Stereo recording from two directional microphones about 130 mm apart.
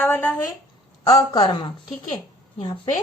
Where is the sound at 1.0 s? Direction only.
30° left (ahead or behind).